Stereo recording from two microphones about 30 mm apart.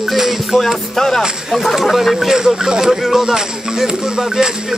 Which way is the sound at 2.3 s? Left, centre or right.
Centre.